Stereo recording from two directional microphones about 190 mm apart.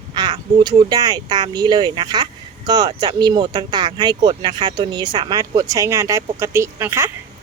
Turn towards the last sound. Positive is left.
turn(degrees=-15)  # may be behind; listen again after turning